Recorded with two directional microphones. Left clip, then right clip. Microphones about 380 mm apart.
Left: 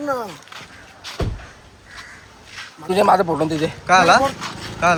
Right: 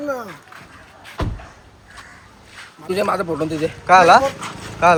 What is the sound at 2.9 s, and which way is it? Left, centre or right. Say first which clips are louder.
Speech: left 5 dB; left.